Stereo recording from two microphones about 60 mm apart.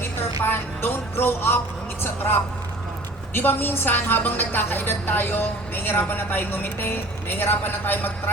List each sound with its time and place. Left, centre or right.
0.0 s music: left
2.0 s a woman's voice: left